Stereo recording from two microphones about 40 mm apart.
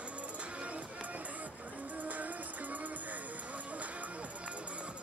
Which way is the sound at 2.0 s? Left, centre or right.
Right.